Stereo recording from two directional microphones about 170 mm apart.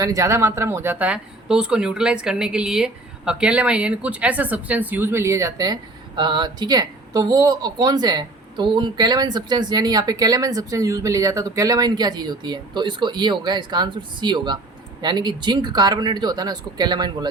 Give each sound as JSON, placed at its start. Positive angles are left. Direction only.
{"t": 0.0, "sound": "speech", "side_deg": -20}